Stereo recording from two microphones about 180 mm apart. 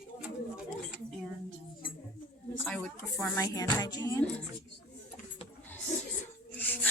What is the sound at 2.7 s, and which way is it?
Speech, 5° left (ahead or behind).